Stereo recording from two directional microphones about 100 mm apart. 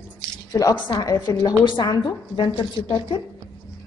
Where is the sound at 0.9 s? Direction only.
40° left (ahead or behind); by 3.1 s 60° left (ahead or behind).